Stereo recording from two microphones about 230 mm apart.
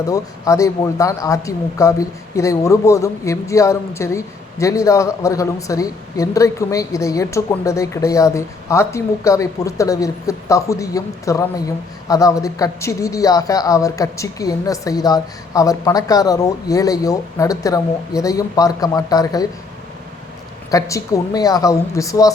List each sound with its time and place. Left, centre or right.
0.1 s speech: centre
20.7 s speech: centre